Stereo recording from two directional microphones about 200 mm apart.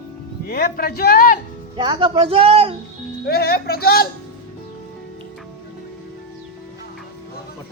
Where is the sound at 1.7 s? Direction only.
25° right (ahead or behind).